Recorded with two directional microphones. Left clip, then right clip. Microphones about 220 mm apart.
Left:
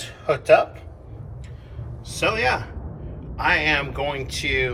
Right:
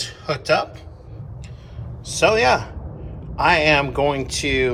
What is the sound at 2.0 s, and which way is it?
Speech, 20° right (ahead or behind).